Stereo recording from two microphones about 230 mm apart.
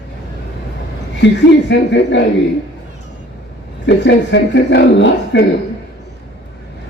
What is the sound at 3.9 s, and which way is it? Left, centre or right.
Speech, left.